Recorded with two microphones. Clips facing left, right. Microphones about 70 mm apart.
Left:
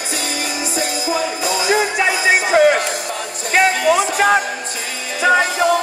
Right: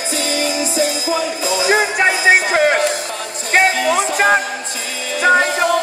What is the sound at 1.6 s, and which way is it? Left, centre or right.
Music, right.